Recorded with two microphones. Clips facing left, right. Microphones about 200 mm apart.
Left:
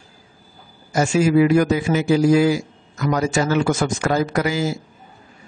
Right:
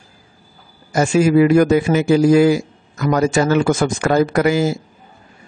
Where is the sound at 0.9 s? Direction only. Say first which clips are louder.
Right 3 dB; 55° right (ahead or behind).